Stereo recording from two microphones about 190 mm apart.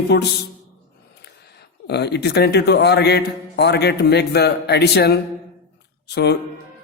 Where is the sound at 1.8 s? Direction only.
60° left (ahead or behind).